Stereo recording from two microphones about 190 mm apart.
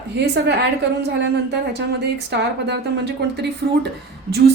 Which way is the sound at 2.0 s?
60° right (ahead or behind).